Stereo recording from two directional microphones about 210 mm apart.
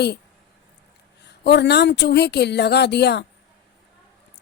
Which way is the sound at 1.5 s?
55° left (ahead or behind).